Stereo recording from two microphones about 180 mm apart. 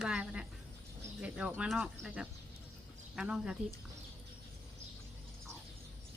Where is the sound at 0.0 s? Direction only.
5° right (ahead or behind).